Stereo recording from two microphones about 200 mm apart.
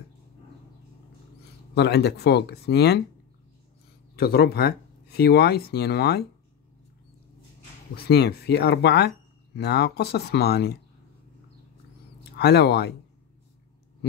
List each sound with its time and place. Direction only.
1.8 s speech: 55° left (ahead or behind)
4.2 s speech: 50° left (ahead or behind)
7.9 s speech: 55° left (ahead or behind)
12.2 s speech: 55° left (ahead or behind)